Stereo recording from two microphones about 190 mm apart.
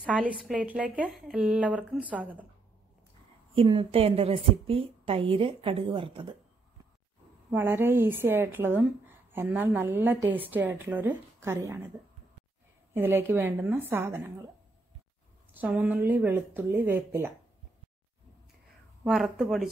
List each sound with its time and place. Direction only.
0.0 s a woman's voice: 5° right (ahead or behind)
3.5 s a woman's voice: 30° right (ahead or behind)
7.5 s a woman's voice: 10° right (ahead or behind)
12.9 s a woman's voice: 10° right (ahead or behind)
15.5 s a woman's voice: 10° right (ahead or behind)
19.0 s speech: 5° right (ahead or behind)